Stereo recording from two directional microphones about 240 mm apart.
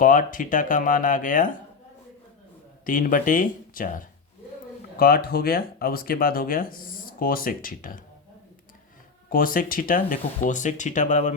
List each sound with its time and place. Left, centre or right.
0.0 s speech: left
2.8 s speech: left
9.3 s speech: left